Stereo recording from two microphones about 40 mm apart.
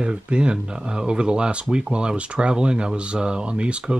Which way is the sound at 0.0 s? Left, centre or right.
Right.